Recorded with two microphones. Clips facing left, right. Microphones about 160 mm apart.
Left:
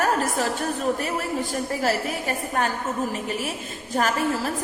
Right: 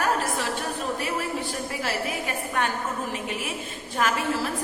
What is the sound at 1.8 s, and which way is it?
Speech, 40° left (ahead or behind).